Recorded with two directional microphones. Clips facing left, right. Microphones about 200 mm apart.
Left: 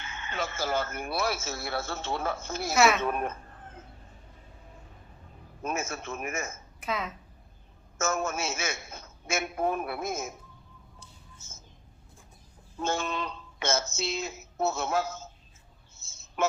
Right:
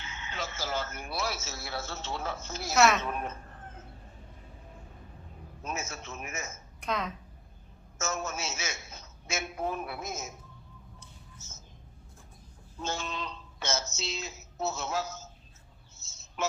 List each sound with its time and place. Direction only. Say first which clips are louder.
0.0 s speech: left 4 dB; 55° left (ahead or behind)
2.7 s a woman's voice: left 1 dB; centre (ahead or behind)
3.0 s a woman's voice: left 5 dB; 55° left (ahead or behind)
5.6 s speech: left 5 dB; 55° left (ahead or behind)
6.7 s speech: even; 5° left (ahead or behind)
7.9 s speech: left 5 dB; 55° left (ahead or behind)
12.8 s speech: left 5 dB; 55° left (ahead or behind)
16.0 s bird: left 5 dB; 55° left (ahead or behind)